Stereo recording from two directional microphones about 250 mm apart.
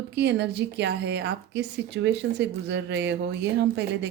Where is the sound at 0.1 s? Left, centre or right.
Right.